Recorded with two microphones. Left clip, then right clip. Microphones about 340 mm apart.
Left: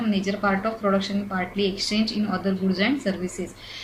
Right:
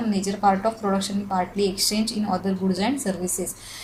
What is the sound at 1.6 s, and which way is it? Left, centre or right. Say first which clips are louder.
A woman's voice: right 1 dB; centre.